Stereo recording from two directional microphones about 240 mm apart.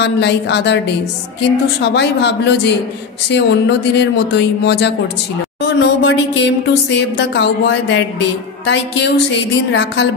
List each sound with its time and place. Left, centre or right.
0.0 s a woman's voice: left
1.8 s a woman's voice: left